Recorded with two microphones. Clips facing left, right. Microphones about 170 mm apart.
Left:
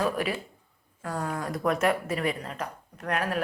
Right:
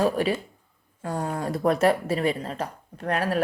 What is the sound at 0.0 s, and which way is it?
Speech, 30° right (ahead or behind).